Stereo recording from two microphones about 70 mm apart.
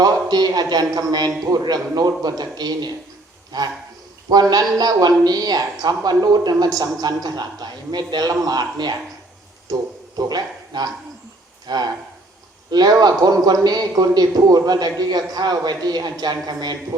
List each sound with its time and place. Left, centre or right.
0.0 s a man's voice: right
10.2 s a man's voice: right